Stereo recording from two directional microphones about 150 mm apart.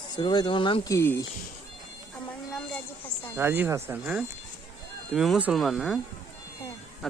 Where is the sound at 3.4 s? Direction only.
15° right (ahead or behind).